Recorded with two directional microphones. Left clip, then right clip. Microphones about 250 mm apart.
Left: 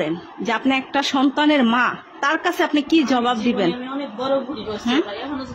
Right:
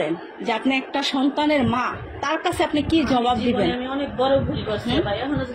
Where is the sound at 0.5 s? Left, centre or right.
Left.